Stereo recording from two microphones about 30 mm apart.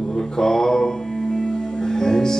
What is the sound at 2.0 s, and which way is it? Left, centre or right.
Music, left.